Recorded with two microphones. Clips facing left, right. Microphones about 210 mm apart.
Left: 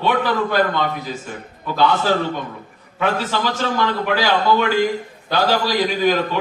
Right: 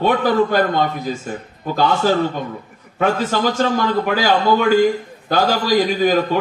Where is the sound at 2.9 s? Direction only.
45° right (ahead or behind).